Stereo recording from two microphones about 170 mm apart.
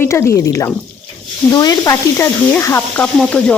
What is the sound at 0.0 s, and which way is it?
Speech, 15° left (ahead or behind).